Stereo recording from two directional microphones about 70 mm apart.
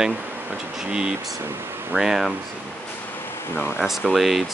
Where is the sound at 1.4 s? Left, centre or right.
Right.